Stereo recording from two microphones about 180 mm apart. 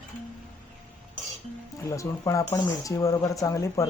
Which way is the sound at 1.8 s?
15° left (ahead or behind).